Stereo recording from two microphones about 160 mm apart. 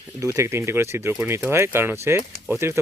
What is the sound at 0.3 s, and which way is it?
Speech, 15° right (ahead or behind).